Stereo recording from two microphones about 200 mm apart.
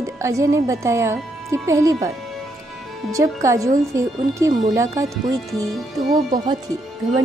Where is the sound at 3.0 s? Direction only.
15° right (ahead or behind).